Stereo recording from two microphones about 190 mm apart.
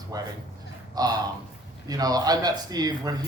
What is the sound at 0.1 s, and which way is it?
A man's voice, 20° right (ahead or behind).